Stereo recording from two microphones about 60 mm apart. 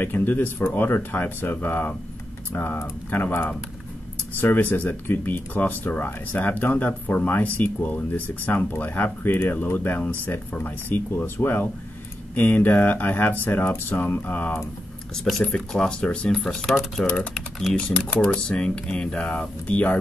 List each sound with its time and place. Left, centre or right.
0.0 s speech: left
15.1 s speech: centre
16.3 s speech: centre
17.0 s speech: centre